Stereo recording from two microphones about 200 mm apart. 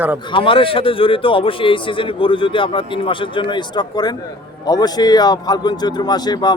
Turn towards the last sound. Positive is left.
turn(degrees=20)  # may be behind; listen again after turning